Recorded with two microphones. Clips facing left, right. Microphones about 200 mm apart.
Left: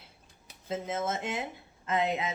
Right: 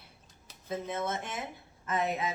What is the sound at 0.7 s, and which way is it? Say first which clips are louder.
Speech: left 2 dB; 20° left (ahead or behind).